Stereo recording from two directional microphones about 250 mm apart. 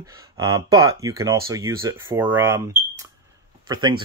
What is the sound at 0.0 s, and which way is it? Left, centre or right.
Speech, centre.